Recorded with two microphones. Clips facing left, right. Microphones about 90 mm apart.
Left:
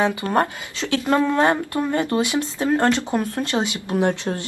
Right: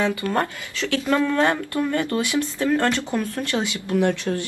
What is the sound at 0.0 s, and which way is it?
Speech, 20° left (ahead or behind).